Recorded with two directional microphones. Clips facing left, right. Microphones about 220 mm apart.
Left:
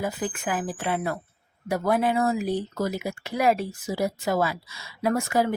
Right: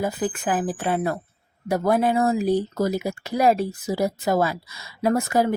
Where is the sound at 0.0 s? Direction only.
40° right (ahead or behind).